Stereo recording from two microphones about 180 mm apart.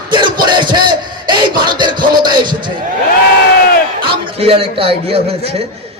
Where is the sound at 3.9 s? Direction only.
30° right (ahead or behind).